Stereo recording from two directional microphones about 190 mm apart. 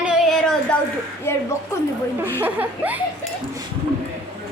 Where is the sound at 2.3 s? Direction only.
10° right (ahead or behind).